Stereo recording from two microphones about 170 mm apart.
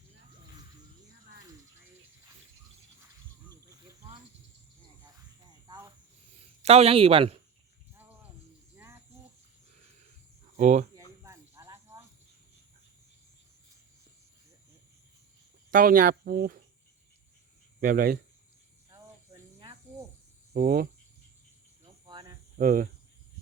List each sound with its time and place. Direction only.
6.6 s speech: 40° right (ahead or behind)
8.7 s cricket: 15° right (ahead or behind)
10.6 s speech: 45° right (ahead or behind)
11.2 s cricket: 20° right (ahead or behind)
15.7 s speech: 55° right (ahead or behind)
17.7 s speech: 55° right (ahead or behind)
18.9 s insect: 25° right (ahead or behind)
20.6 s speech: 60° right (ahead or behind)
22.0 s cricket: 25° right (ahead or behind)
22.5 s speech: 55° right (ahead or behind)